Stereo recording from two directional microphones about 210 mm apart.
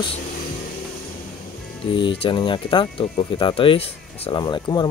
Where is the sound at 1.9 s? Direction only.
25° left (ahead or behind).